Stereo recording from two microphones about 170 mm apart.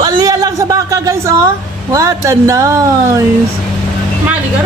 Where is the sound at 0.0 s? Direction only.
20° right (ahead or behind).